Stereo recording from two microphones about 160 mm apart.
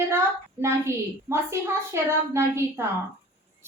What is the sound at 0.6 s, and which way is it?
A woman's voice, 15° right (ahead or behind).